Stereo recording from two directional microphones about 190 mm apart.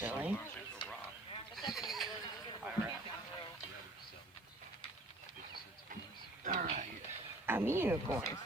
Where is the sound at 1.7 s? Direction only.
Centre (ahead or behind).